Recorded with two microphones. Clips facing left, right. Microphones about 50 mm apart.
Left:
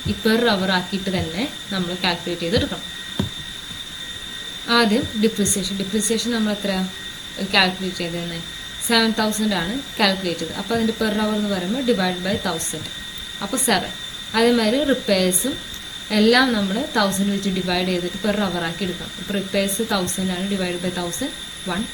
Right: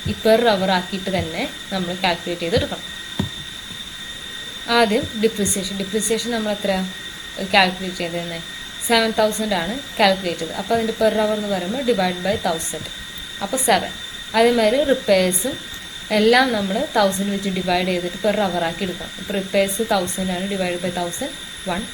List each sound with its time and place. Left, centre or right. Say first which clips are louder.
0.2 s a woman's voice: right 4 dB; centre
4.6 s a woman's voice: right 1 dB; centre
21.7 s speech: right 1 dB; right